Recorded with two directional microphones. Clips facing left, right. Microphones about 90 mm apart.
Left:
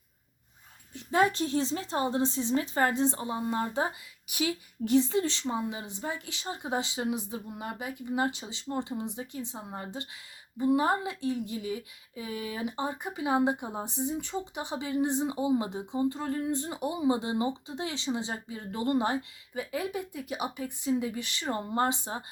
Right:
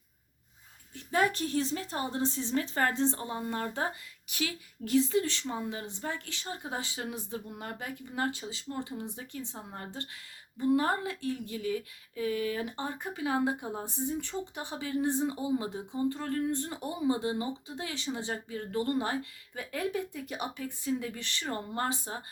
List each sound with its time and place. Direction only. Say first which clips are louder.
0.9 s a woman's voice: left 3 dB; 25° left (ahead or behind)
19.5 s a woman's voice: left 1 dB; 10° left (ahead or behind); by 22.2 s 25° left (ahead or behind)